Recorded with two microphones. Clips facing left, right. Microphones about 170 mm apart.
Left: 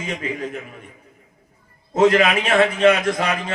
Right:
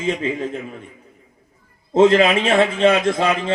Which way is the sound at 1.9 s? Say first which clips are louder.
Right 3 dB; 25° right (ahead or behind).